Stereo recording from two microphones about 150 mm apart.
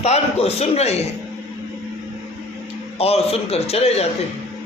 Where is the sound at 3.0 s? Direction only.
40° left (ahead or behind).